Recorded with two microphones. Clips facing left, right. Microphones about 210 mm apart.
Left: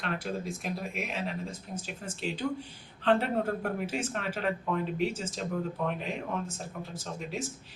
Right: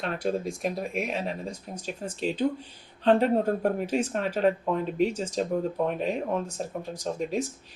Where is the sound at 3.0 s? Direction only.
40° right (ahead or behind).